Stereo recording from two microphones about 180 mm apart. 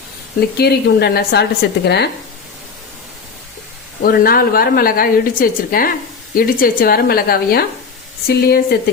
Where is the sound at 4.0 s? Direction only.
55° left (ahead or behind).